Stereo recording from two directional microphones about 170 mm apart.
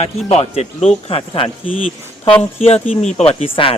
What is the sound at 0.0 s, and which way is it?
Speech, 40° left (ahead or behind).